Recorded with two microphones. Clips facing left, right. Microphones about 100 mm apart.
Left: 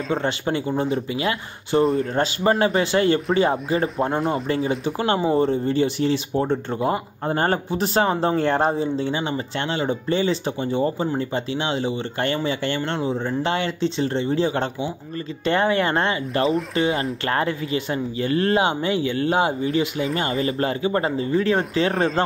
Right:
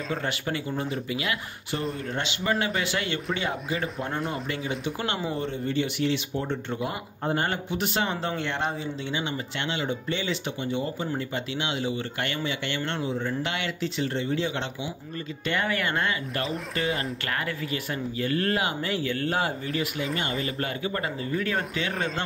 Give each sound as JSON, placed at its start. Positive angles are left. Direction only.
{"t": 0.1, "sound": "speech", "side_deg": 30}
{"t": 20.2, "sound": "speech", "side_deg": 35}